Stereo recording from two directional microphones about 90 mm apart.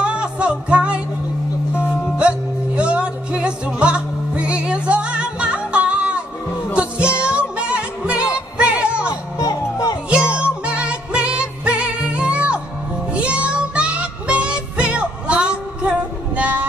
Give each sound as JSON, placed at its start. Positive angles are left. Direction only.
{"t": 0.0, "sound": "music", "side_deg": -10}
{"t": 2.1, "sound": "music", "side_deg": -10}
{"t": 9.4, "sound": "music", "side_deg": 45}
{"t": 10.3, "sound": "music", "side_deg": -10}